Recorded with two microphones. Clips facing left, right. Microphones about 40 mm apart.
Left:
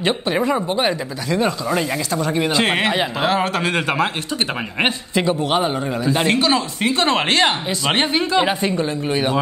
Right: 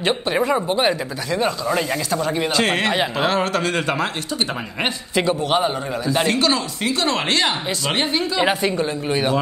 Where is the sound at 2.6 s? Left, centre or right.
Centre.